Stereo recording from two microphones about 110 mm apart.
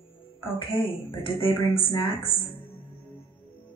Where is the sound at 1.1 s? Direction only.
55° left (ahead or behind).